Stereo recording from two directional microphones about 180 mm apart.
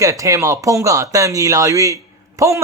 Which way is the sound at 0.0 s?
15° right (ahead or behind).